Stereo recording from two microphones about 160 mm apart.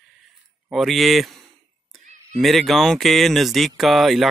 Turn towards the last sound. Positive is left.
turn(degrees=0)  # may be behind; listen again after turning